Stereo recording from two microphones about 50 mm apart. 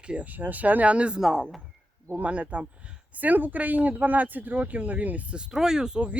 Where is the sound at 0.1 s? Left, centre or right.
Right.